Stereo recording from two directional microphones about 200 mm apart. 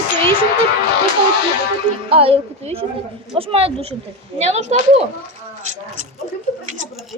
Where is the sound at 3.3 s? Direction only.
30° right (ahead or behind).